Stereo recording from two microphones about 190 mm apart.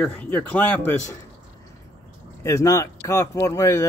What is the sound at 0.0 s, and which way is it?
Speech, 5° left (ahead or behind).